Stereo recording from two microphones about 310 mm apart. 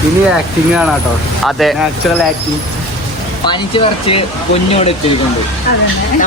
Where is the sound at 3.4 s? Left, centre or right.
Centre.